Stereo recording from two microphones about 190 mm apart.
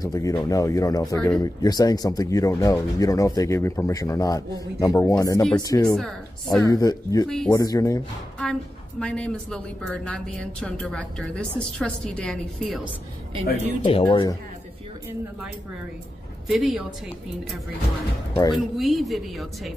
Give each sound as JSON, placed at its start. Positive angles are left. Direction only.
{"t": 0.0, "sound": "speech", "side_deg": 20}
{"t": 5.9, "sound": "speech", "side_deg": 0}
{"t": 6.6, "sound": "speech", "side_deg": 15}
{"t": 7.2, "sound": "speech", "side_deg": 0}
{"t": 7.5, "sound": "speech", "side_deg": 20}
{"t": 9.0, "sound": "speech", "side_deg": 5}
{"t": 13.8, "sound": "speech", "side_deg": 30}
{"t": 16.4, "sound": "speech", "side_deg": 0}
{"t": 18.3, "sound": "speech", "side_deg": 20}
{"t": 18.6, "sound": "speech", "side_deg": 0}